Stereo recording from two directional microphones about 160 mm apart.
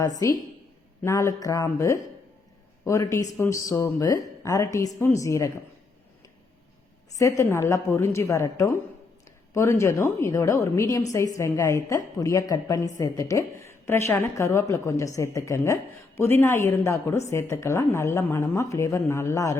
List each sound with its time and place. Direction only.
0.0 s a woman's voice: 20° left (ahead or behind)
7.2 s a woman's voice: 20° left (ahead or behind)